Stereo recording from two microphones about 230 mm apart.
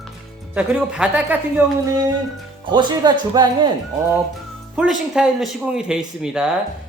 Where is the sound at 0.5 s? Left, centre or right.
Centre.